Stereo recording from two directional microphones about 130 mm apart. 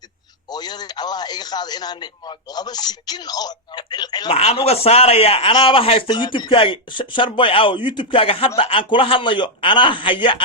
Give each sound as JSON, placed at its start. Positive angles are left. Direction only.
{"t": 0.5, "sound": "a man's voice", "side_deg": 30}
{"t": 4.3, "sound": "a man's voice", "side_deg": 50}